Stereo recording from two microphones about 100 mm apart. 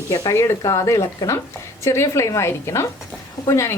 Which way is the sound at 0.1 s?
40° left (ahead or behind).